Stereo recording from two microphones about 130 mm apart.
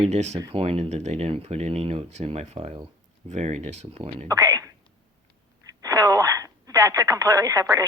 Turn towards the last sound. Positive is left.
turn(degrees=-25)  # may be behind; listen again after turning